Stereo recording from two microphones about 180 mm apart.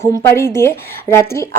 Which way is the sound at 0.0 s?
15° left (ahead or behind).